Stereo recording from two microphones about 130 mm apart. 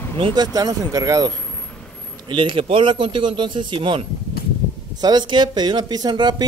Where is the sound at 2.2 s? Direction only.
40° right (ahead or behind).